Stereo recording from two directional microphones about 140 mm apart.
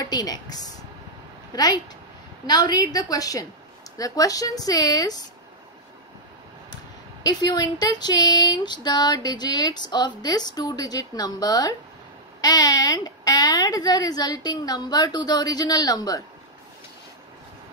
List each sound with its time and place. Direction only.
0.0 s a woman's voice: 30° left (ahead or behind)
7.2 s speech: 30° left (ahead or behind)